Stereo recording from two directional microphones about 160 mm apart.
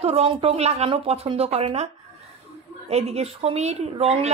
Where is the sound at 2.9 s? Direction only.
40° right (ahead or behind).